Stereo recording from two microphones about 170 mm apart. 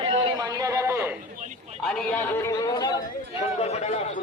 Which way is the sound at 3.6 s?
40° left (ahead or behind).